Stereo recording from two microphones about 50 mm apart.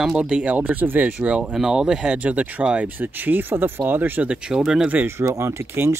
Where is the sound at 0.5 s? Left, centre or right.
Right.